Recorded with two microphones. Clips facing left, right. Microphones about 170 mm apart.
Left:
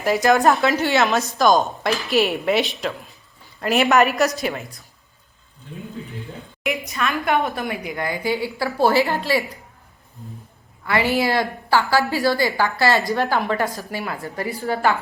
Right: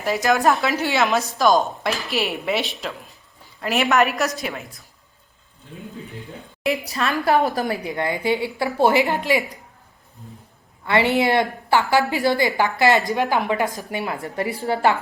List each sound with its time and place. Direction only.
0.0 s speech: centre (ahead or behind)
6.6 s a woman's voice: 35° right (ahead or behind); by 9.6 s 15° right (ahead or behind)
10.8 s a woman's voice: 25° right (ahead or behind)